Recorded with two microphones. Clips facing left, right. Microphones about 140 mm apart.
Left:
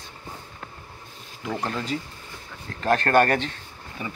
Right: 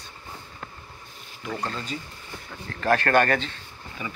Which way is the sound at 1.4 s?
20° left (ahead or behind).